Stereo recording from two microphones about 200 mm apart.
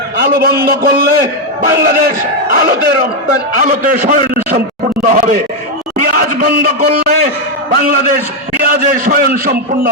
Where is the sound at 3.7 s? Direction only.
40° right (ahead or behind).